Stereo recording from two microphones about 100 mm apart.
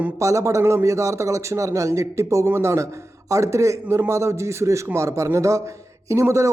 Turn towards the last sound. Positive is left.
turn(degrees=-30)  # may be behind; listen again after turning